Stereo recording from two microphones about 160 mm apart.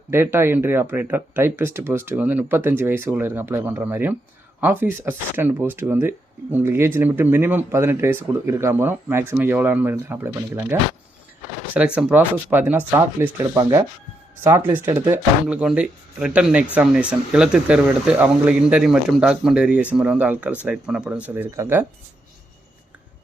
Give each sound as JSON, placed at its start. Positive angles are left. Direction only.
{"t": 0.1, "sound": "speech", "side_deg": -15}
{"t": 11.9, "sound": "speech", "side_deg": -10}